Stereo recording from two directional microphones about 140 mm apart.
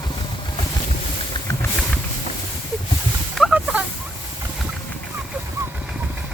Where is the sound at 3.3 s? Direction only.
Centre (ahead or behind).